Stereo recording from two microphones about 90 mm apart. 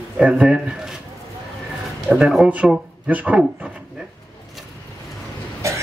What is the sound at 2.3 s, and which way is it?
A man's voice, 10° right (ahead or behind).